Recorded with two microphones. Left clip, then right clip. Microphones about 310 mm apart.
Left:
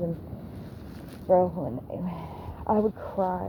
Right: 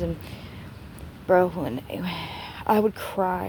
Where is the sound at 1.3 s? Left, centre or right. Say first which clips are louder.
Right 2 dB; right.